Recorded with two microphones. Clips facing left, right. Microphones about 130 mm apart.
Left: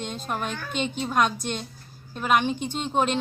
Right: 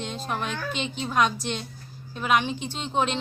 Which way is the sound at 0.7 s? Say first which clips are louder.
Left 3 dB; 50° left (ahead or behind).